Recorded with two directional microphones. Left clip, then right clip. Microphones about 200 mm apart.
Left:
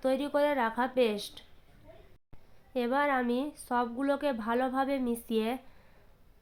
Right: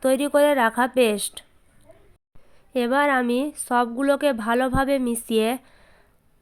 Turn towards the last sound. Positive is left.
turn(degrees=-35)  # may be behind; listen again after turning